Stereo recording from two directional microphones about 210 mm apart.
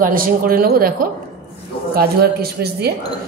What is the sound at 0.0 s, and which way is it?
Speech, 40° right (ahead or behind).